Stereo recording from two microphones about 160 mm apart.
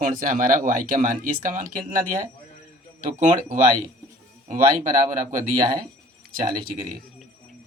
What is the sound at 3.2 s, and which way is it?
Speech, 55° right (ahead or behind).